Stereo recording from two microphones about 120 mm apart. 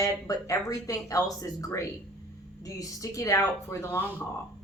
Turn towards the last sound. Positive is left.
turn(degrees=20)  # may be behind; listen again after turning